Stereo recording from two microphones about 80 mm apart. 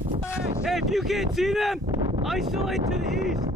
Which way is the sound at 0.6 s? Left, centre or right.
Centre.